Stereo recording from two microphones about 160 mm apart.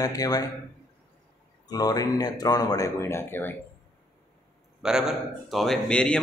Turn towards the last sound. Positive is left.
turn(degrees=5)  # may be behind; listen again after turning